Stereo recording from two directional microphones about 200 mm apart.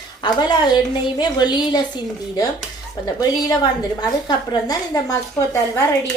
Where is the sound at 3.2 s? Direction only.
20° left (ahead or behind).